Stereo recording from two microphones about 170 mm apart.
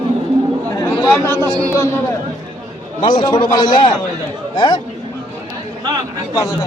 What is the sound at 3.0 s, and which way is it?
A man's voice, 25° left (ahead or behind).